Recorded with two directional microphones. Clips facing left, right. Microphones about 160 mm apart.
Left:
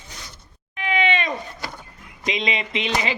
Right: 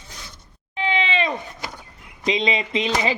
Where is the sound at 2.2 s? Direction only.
30° right (ahead or behind).